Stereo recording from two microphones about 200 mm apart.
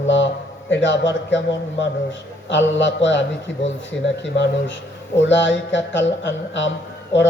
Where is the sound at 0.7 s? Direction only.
65° left (ahead or behind).